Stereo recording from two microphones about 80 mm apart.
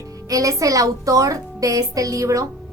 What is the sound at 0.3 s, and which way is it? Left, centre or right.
A woman's voice, right.